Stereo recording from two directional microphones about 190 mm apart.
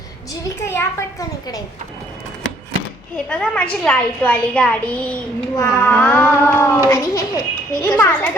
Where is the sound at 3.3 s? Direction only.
5° left (ahead or behind).